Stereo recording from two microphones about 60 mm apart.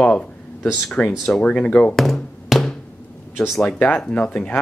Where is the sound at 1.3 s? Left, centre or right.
Centre.